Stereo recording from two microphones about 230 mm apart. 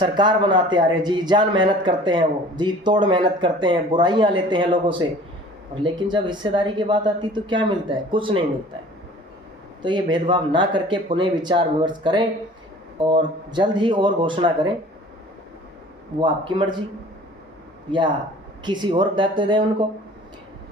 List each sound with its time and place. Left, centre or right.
0.0 s speech: centre
9.8 s speech: centre
16.2 s speech: right
18.6 s speech: centre